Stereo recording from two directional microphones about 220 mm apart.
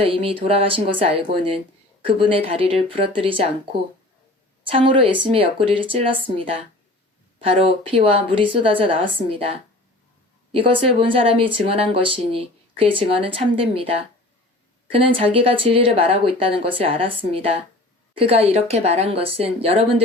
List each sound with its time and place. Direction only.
0.0 s speech: 25° right (ahead or behind)
4.6 s speech: 25° right (ahead or behind)
14.9 s speech: 25° right (ahead or behind)